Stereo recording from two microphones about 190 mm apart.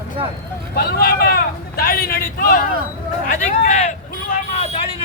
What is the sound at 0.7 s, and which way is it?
A man's voice, 55° left (ahead or behind).